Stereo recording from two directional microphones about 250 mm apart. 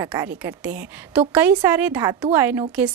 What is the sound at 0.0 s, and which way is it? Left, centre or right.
A woman's voice, centre.